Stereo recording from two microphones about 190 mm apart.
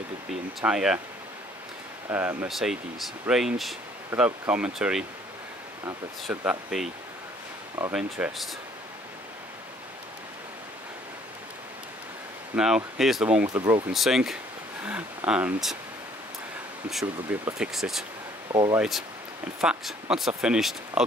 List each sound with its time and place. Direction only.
0.3 s speech: centre (ahead or behind)
2.0 s speech: 10° right (ahead or behind)
7.9 s speech: 5° right (ahead or behind)
12.5 s speech: 5° right (ahead or behind)
13.5 s speech: 20° right (ahead or behind)
13.9 s speech: centre (ahead or behind)
17.0 s speech: 15° right (ahead or behind)
17.6 s speech: centre (ahead or behind)
18.5 s speech: 25° right (ahead or behind)
18.8 s speech: centre (ahead or behind)